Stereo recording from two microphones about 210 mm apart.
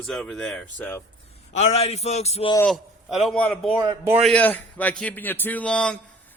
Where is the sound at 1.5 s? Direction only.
30° left (ahead or behind).